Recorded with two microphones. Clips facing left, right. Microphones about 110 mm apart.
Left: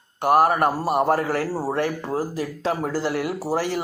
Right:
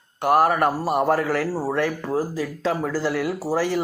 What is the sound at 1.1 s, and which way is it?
Speech, 35° left (ahead or behind).